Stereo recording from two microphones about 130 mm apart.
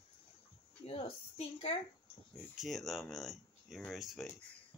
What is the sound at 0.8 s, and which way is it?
Speech, 45° left (ahead or behind).